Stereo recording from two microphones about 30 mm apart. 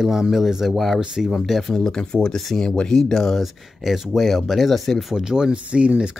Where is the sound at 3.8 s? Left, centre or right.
Centre.